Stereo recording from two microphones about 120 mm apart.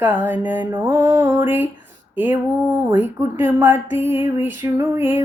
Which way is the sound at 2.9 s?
15° right (ahead or behind).